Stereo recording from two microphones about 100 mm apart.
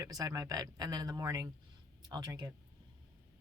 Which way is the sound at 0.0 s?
40° right (ahead or behind).